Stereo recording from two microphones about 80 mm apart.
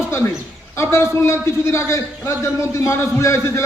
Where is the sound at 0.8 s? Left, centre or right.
Left.